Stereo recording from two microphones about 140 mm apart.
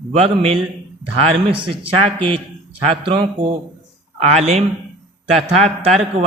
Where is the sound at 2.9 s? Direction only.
40° right (ahead or behind).